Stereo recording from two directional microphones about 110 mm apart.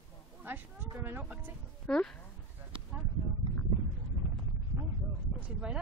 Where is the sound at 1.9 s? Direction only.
10° left (ahead or behind).